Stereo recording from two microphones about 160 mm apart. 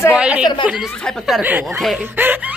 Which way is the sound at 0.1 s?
5° right (ahead or behind).